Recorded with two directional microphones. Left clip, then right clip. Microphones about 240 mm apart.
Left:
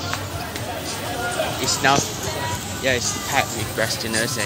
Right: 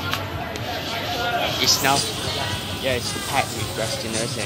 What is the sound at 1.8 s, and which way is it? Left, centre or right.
Speech, centre.